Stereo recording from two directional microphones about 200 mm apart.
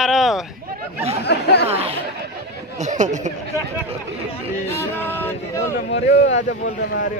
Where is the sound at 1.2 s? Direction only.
55° left (ahead or behind).